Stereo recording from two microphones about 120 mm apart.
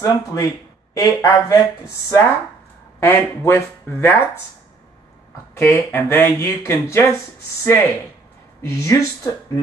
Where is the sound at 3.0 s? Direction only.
20° left (ahead or behind).